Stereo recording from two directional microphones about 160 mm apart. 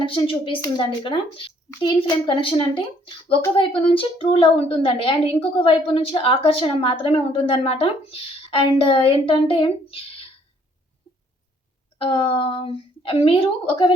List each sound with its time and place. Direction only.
0.0 s a woman's voice: 30° left (ahead or behind)
11.9 s a woman's voice: 35° left (ahead or behind)